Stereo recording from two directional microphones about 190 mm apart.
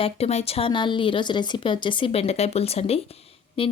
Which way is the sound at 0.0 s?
35° left (ahead or behind).